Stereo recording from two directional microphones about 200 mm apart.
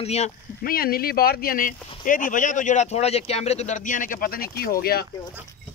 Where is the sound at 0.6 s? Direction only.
50° left (ahead or behind).